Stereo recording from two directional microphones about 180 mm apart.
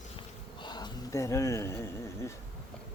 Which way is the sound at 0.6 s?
25° left (ahead or behind).